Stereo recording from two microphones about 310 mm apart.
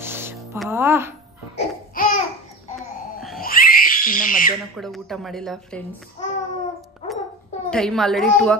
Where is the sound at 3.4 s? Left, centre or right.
Left.